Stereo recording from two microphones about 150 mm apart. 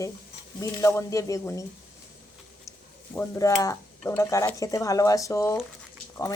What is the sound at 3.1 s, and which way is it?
Speech, 20° left (ahead or behind).